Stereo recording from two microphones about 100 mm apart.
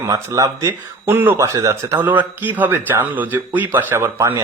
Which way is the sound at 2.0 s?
20° right (ahead or behind).